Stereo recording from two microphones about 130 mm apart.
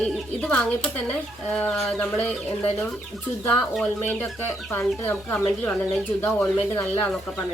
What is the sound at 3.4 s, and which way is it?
Speech, 15° left (ahead or behind).